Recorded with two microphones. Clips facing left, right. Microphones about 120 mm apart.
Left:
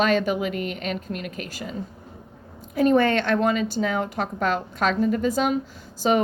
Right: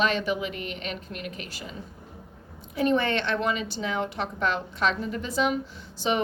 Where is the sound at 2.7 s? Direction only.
45° left (ahead or behind).